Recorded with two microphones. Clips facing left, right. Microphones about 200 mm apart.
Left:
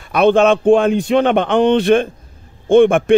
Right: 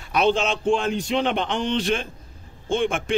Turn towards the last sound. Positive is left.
turn(degrees=55)  # may be behind; listen again after turning